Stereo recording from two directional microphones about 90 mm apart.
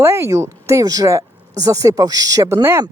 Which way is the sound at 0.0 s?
30° right (ahead or behind).